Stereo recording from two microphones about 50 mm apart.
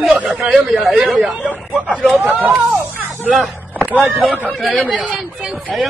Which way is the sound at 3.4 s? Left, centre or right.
Right.